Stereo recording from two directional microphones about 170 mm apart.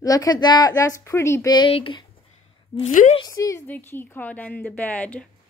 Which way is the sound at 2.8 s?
45° left (ahead or behind).